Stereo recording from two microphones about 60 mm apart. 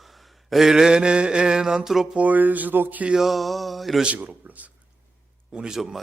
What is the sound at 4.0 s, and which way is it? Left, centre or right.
Groan, right.